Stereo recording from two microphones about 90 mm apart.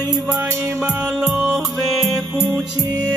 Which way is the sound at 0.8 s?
10° right (ahead or behind).